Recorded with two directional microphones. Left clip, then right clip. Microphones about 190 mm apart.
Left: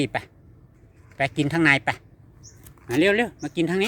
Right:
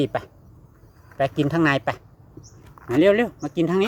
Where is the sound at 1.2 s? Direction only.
25° left (ahead or behind).